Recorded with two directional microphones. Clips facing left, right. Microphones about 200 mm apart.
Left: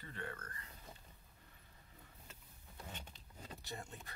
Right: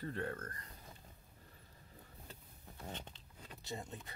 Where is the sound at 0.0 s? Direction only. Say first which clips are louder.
Right 7 dB; 40° right (ahead or behind).